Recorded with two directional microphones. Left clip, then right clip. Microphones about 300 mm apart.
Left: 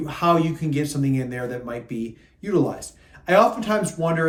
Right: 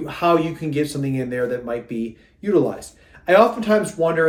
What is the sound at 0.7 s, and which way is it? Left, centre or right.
Speech, centre.